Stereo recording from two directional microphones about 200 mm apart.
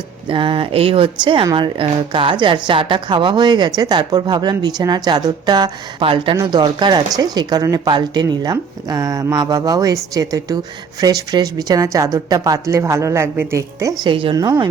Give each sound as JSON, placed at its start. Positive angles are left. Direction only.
{"t": 0.3, "sound": "speech", "side_deg": -25}